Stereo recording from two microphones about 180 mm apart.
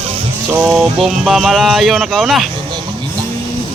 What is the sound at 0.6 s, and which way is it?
Speech, 5° right (ahead or behind).